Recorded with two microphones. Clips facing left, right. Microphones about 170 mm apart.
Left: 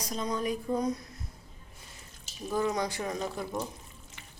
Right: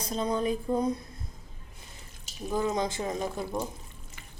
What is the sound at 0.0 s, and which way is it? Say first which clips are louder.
Speech: right 3 dB; 30° right (ahead or behind).